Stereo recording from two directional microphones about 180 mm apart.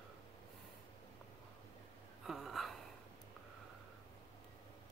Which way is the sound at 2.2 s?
Centre (ahead or behind).